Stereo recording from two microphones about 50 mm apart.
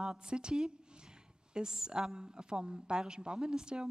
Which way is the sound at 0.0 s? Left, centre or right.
Centre.